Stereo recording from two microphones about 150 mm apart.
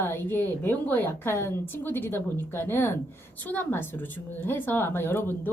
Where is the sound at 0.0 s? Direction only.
15° left (ahead or behind).